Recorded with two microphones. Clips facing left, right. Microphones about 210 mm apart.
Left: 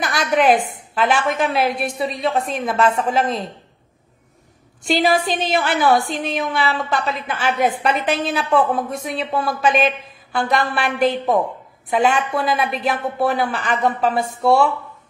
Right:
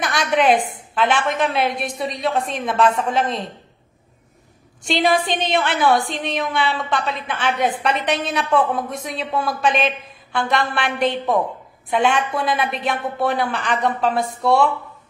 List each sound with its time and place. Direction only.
0.9 s a woman's voice: 5° left (ahead or behind)
4.8 s a woman's voice: centre (ahead or behind)